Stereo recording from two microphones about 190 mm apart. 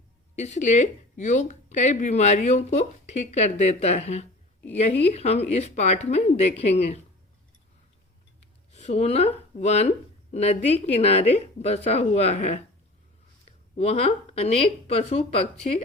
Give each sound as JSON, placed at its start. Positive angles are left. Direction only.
{"t": 0.3, "sound": "speech", "side_deg": 40}
{"t": 8.4, "sound": "a sound", "side_deg": 35}
{"t": 10.3, "sound": "speech", "side_deg": 35}
{"t": 13.7, "sound": "speech", "side_deg": 35}